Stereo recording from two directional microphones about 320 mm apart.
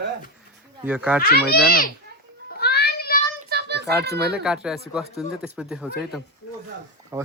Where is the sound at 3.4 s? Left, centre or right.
Right.